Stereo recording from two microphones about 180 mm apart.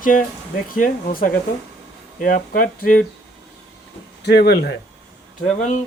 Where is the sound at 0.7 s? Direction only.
50° left (ahead or behind).